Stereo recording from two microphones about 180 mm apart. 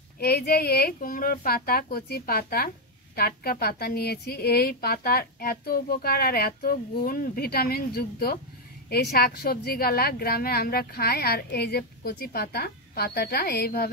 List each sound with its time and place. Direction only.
0.2 s a woman's voice: 60° left (ahead or behind)